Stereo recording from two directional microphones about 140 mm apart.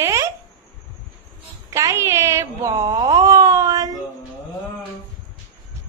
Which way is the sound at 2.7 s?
30° right (ahead or behind).